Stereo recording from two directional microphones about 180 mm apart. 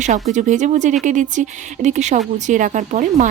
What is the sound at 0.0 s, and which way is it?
Speech, 40° right (ahead or behind).